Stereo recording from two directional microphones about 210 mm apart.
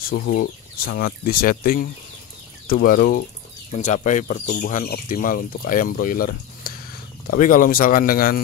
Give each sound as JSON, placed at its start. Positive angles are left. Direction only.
{"t": 0.0, "sound": "speech", "side_deg": 50}